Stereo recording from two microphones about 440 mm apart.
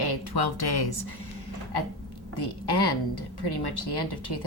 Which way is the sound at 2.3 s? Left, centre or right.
Left.